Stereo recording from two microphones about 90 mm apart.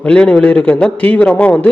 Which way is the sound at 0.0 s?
10° left (ahead or behind).